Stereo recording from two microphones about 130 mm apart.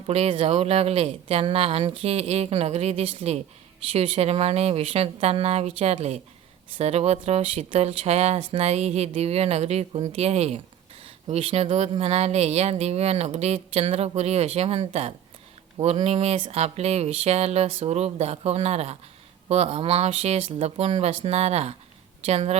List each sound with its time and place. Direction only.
0.1 s speech: 50° right (ahead or behind)